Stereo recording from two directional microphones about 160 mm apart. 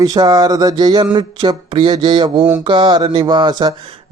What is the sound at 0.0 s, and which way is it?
Speech, 25° right (ahead or behind).